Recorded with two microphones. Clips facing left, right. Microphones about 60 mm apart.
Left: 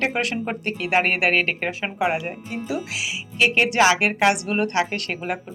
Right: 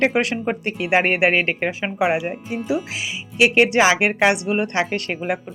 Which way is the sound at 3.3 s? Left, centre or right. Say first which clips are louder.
Right 3 dB; centre.